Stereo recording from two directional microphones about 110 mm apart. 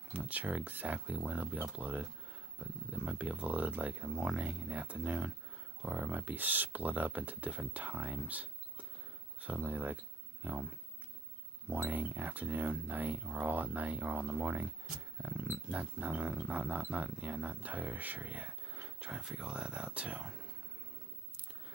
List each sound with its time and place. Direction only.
0.1 s pig: 15° right (ahead or behind)
11.7 s pig: 15° right (ahead or behind)